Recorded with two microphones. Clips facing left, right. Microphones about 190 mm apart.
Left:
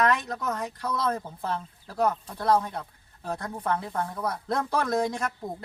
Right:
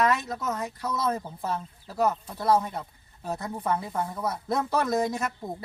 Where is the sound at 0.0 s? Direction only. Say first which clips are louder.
Even; 5° right (ahead or behind).